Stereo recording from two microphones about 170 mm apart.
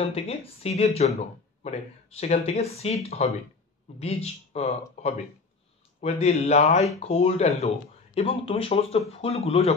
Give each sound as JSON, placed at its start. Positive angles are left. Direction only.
{"t": 0.0, "sound": "speech", "side_deg": 35}